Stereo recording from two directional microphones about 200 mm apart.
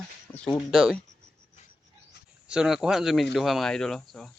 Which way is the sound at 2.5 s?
5° right (ahead or behind).